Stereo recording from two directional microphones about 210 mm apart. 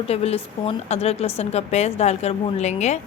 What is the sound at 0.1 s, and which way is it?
A woman's voice, 30° left (ahead or behind).